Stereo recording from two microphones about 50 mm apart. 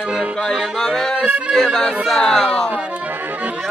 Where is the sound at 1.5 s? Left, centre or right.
Centre.